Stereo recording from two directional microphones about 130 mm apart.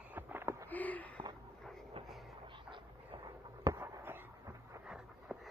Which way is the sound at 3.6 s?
25° right (ahead or behind).